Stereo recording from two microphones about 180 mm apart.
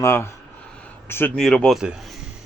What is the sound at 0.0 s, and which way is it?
A man's voice, 15° left (ahead or behind).